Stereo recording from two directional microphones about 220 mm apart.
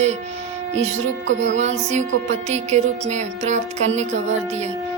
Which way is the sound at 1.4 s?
30° right (ahead or behind).